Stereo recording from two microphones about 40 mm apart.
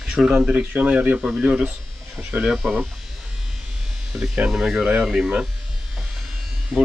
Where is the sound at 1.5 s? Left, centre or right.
Centre.